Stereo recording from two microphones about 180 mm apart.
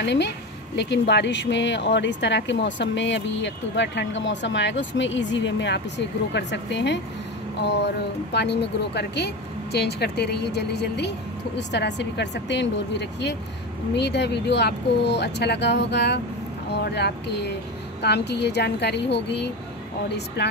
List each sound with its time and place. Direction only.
0.0 s speech: 75° left (ahead or behind)